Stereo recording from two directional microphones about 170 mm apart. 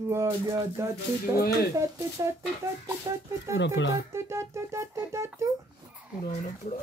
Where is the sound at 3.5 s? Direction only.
90° left.